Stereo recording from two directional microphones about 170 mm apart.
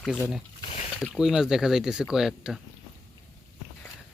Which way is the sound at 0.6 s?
35° left (ahead or behind).